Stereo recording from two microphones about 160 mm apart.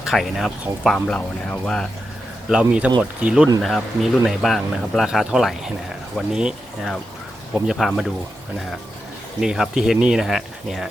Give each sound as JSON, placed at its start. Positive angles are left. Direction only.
{"t": 0.0, "sound": "speech", "side_deg": 0}
{"t": 9.4, "sound": "speech", "side_deg": -5}